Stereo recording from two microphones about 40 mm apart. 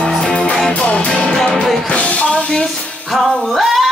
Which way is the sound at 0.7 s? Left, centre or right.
Left.